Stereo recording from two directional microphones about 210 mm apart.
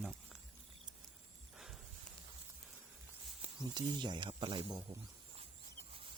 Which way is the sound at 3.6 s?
20° right (ahead or behind).